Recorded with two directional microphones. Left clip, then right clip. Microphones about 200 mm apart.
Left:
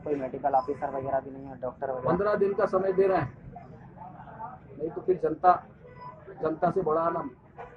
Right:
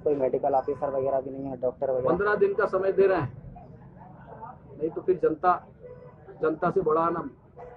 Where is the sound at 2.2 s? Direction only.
10° right (ahead or behind).